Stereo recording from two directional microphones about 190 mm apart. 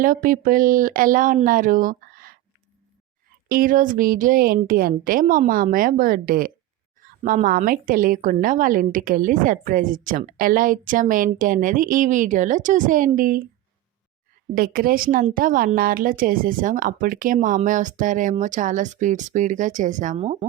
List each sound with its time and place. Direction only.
0.0 s a woman's voice: 45° right (ahead or behind)
3.5 s a woman's voice: 45° right (ahead or behind)
14.5 s a woman's voice: 50° right (ahead or behind); by 20.5 s 30° right (ahead or behind)